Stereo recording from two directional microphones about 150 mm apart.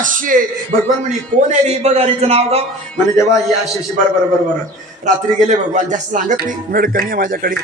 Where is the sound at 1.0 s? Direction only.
50° right (ahead or behind).